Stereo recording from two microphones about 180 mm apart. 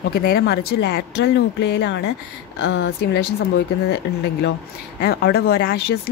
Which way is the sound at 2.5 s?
80° left.